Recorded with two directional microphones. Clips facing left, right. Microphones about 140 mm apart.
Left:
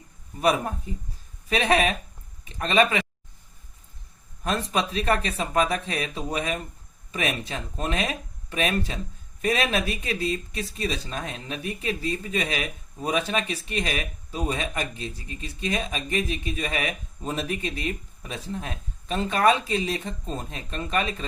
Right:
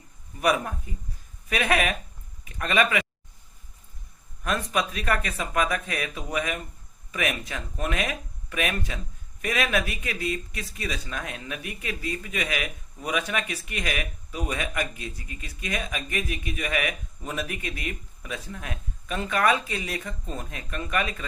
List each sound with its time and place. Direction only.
0.9 s speech: 25° left (ahead or behind)
4.4 s speech: 30° left (ahead or behind)